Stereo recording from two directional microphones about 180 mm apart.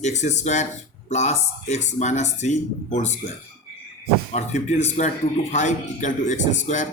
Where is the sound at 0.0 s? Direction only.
40° left (ahead or behind).